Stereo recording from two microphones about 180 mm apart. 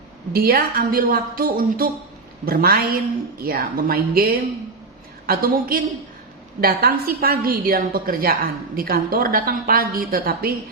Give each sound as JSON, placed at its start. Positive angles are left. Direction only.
{"t": 0.3, "sound": "a woman's voice", "side_deg": -55}